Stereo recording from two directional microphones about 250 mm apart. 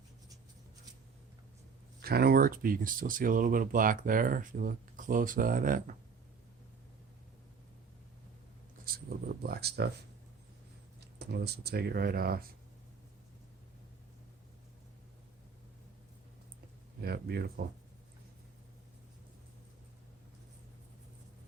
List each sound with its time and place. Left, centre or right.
2.0 s speech: right
8.8 s speech: right
11.0 s speech: right
17.0 s speech: right